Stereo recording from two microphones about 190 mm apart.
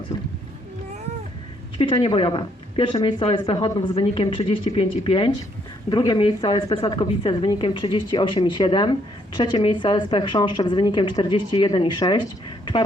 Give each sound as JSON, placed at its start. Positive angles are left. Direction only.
{"t": 0.1, "sound": "boat", "side_deg": 25}
{"t": 1.8, "sound": "speech", "side_deg": 25}